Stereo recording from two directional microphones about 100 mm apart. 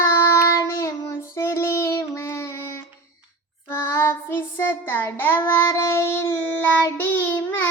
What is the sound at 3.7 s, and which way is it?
Child singing, 25° left (ahead or behind).